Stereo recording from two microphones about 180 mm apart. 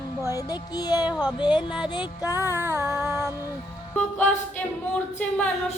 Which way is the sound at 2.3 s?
15° right (ahead or behind).